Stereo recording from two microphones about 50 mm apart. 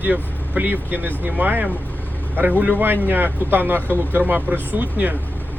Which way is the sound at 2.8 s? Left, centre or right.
Right.